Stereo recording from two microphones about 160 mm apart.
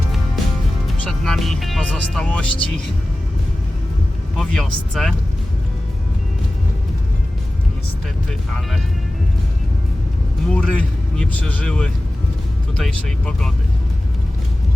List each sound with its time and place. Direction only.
1.0 s speech: 5° left (ahead or behind)
4.4 s speech: 5° left (ahead or behind)
8.3 s speech: 5° left (ahead or behind)
10.5 s speech: 5° left (ahead or behind)